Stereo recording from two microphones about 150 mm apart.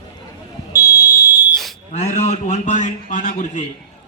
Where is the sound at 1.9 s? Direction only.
50° left (ahead or behind).